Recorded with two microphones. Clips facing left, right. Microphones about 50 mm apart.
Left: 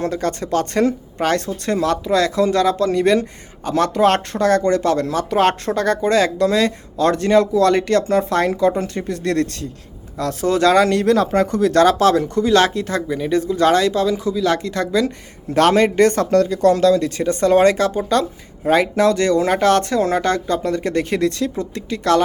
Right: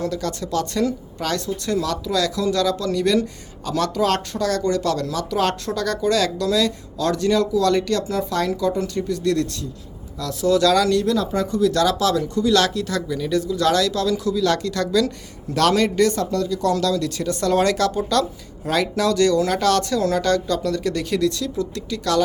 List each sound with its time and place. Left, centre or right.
0.0 s speech: left